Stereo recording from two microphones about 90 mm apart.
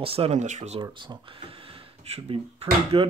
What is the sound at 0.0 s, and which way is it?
Speech, 90° right.